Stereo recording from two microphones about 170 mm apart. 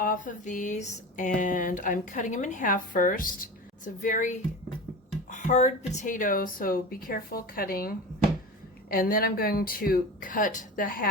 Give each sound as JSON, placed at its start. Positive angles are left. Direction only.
{"t": 0.0, "sound": "speech", "side_deg": 50}